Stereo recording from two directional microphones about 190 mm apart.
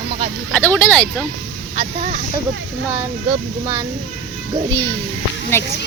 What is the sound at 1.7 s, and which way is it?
Speech, 35° right (ahead or behind).